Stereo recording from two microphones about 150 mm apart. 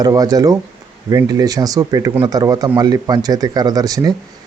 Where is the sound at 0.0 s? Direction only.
25° right (ahead or behind).